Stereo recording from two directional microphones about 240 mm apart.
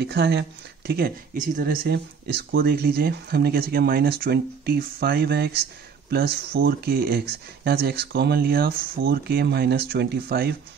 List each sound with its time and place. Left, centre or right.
0.0 s speech: right